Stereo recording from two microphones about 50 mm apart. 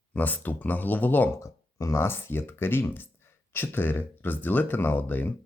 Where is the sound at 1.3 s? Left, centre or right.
Left.